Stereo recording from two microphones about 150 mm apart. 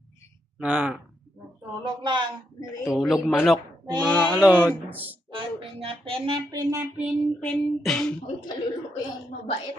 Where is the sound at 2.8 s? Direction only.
Centre (ahead or behind).